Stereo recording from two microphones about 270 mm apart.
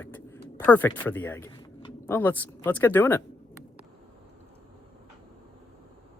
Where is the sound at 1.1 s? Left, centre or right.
Centre.